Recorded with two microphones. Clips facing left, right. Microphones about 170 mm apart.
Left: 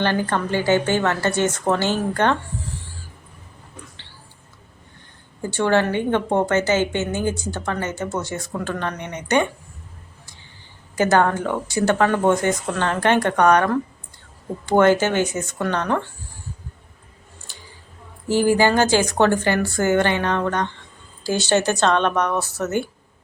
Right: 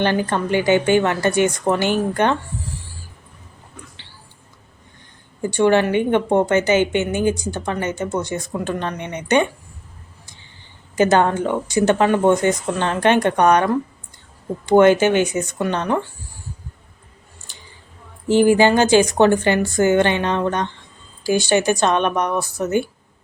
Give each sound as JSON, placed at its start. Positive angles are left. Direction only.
{"t": 0.0, "sound": "a woman's voice", "side_deg": -15}
{"t": 5.4, "sound": "a woman's voice", "side_deg": -15}
{"t": 10.9, "sound": "speech", "side_deg": -20}
{"t": 14.7, "sound": "a woman's voice", "side_deg": -15}
{"t": 18.3, "sound": "a woman's voice", "side_deg": -20}